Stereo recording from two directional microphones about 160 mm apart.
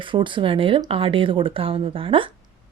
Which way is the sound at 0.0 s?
30° right (ahead or behind).